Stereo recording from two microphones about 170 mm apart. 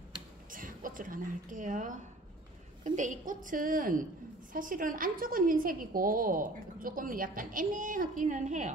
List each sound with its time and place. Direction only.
0.5 s a woman's voice: 55° right (ahead or behind)